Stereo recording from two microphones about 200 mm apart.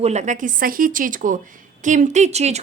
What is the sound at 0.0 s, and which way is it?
A woman's voice, 35° right (ahead or behind).